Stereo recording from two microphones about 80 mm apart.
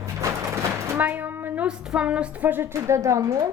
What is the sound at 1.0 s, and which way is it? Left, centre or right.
A woman's voice, right.